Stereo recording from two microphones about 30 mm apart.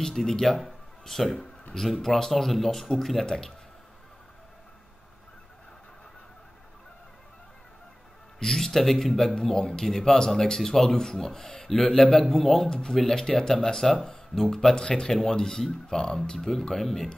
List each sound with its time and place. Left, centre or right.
0.3 s speech: centre
0.7 s music: centre
1.4 s speech: centre
2.3 s speech: centre
3.3 s speech: centre
8.4 s speech: centre
12.6 s speech: left
14.8 s speech: left